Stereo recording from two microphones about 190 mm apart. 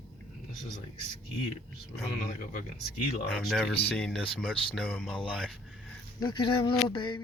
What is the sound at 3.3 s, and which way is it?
Speech, centre (ahead or behind).